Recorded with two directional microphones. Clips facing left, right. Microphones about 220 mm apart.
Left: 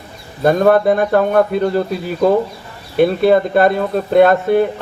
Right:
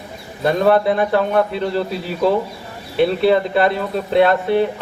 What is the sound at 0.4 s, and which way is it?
A man's voice, 45° left (ahead or behind).